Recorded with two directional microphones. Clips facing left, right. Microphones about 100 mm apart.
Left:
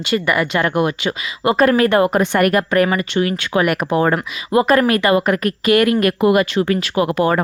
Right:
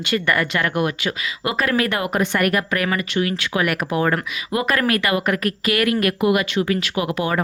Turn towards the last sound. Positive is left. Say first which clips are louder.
# left 6 dB
turn(degrees=40)  # may be behind; listen again after turning